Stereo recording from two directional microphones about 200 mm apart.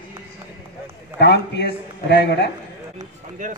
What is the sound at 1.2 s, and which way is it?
A man's voice, 60° left (ahead or behind).